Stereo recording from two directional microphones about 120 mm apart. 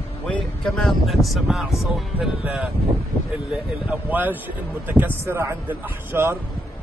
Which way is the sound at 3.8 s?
15° right (ahead or behind).